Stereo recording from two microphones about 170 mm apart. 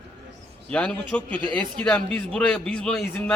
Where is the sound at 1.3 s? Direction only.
30° right (ahead or behind).